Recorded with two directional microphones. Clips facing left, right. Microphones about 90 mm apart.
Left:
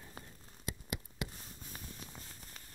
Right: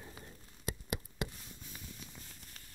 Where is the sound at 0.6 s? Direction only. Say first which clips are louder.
Right 3 dB; 35° right (ahead or behind).